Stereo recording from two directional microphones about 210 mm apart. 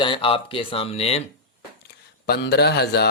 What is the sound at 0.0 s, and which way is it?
Speech, 25° left (ahead or behind).